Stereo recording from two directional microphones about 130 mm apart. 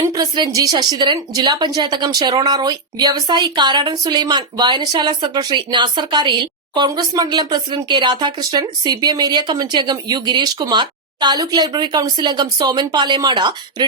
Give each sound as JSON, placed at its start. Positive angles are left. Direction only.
{"t": 0.0, "sound": "speech", "side_deg": -30}